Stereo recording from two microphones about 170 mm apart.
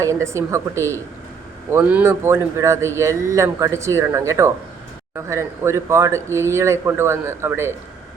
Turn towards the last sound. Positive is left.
turn(degrees=-15)  # may be behind; listen again after turning